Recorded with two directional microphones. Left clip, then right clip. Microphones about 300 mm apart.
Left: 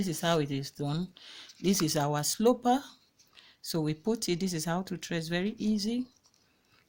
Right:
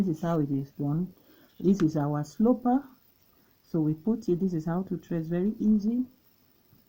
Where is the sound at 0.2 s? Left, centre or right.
Left.